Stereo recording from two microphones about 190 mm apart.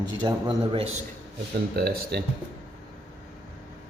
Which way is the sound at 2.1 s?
60° right (ahead or behind).